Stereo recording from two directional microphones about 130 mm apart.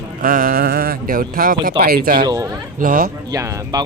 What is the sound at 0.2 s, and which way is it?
Speech, 90° right.